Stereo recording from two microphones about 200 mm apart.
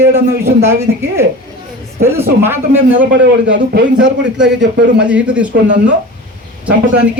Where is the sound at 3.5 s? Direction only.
60° right (ahead or behind).